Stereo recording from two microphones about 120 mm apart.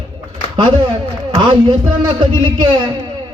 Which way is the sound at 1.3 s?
40° right (ahead or behind).